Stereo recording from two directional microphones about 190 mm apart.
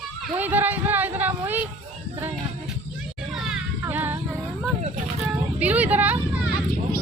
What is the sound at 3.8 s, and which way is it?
Female singing, 10° right (ahead or behind).